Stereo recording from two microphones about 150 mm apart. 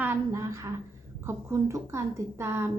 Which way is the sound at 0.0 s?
15° right (ahead or behind).